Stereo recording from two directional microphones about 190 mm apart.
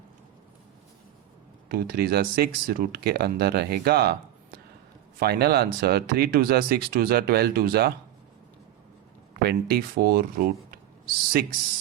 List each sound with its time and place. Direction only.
1.7 s speech: 55° right (ahead or behind)
5.2 s speech: 55° right (ahead or behind)
9.3 s speech: 55° right (ahead or behind)